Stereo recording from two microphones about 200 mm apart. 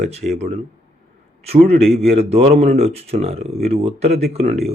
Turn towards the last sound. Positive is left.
turn(degrees=-30)  # may be behind; listen again after turning